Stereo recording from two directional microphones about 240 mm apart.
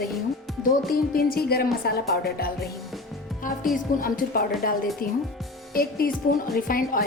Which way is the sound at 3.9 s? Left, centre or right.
Left.